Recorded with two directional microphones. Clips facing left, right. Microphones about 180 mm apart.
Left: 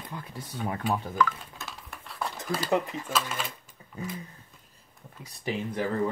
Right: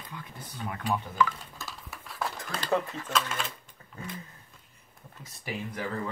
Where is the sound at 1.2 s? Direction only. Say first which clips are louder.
Left 1 dB; centre (ahead or behind).